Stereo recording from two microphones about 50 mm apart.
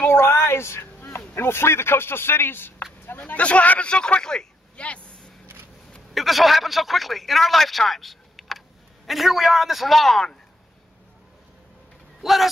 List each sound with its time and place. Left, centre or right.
0.0 s a sound: left
1.3 s a man's voice: left
3.3 s speech: left
3.9 s speech: centre
4.8 s vehicle: left
6.1 s speech: centre
12.2 s speech: centre